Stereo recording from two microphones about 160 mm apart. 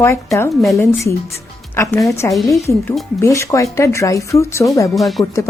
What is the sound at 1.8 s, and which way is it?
Speech, 20° left (ahead or behind).